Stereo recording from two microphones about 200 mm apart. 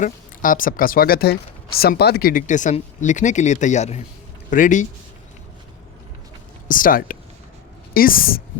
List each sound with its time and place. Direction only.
0.0 s speech: 45° left (ahead or behind)
6.7 s speech: 45° left (ahead or behind)